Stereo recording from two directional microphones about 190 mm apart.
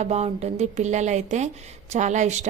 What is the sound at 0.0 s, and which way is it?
A woman's voice, 35° right (ahead or behind).